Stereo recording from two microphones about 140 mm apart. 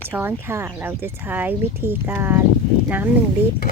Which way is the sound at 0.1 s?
15° right (ahead or behind).